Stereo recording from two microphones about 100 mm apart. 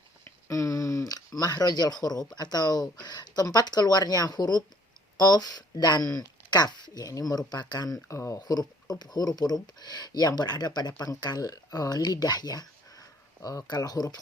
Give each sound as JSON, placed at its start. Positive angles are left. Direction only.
{"t": 0.4, "sound": "speech", "side_deg": 30}
{"t": 8.0, "sound": "speech", "side_deg": 30}
{"t": 8.4, "sound": "speech", "side_deg": 40}